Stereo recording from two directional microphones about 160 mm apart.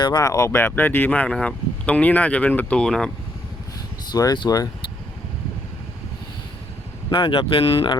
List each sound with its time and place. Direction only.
0.0 s speech: 25° left (ahead or behind); by 3.1 s 5° left (ahead or behind)
4.1 s speech: 25° left (ahead or behind)
7.1 s speech: 35° left (ahead or behind)